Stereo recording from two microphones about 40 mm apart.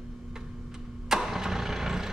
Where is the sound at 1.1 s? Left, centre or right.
Centre.